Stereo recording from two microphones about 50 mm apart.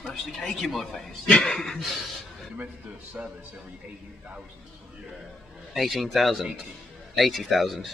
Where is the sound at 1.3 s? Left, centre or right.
Left.